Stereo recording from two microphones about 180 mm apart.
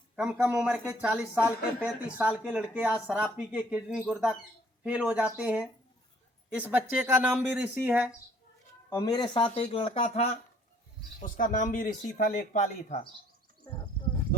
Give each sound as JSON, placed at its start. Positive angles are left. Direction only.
{"t": 0.2, "sound": "speech", "side_deg": -5}
{"t": 9.0, "sound": "speech", "side_deg": 25}
{"t": 11.2, "sound": "speech", "side_deg": 45}